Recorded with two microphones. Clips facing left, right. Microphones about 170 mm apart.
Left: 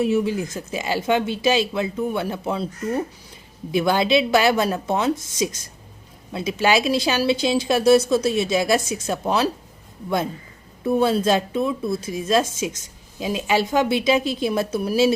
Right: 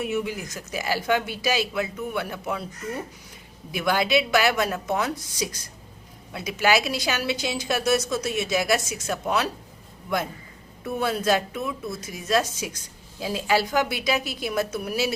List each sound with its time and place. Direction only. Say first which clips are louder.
0.0 s a woman's voice: left 7 dB; 30° left (ahead or behind)
3.7 s a woman's voice: left 4 dB; 25° left (ahead or behind)
10.8 s a woman's voice: left 6 dB; 30° left (ahead or behind)